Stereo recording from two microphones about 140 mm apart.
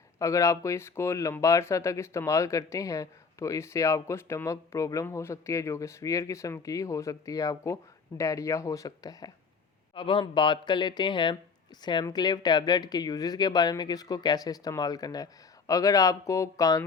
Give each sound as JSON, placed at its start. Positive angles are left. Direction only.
{"t": 0.2, "sound": "speech", "side_deg": 20}
{"t": 9.9, "sound": "speech", "side_deg": 35}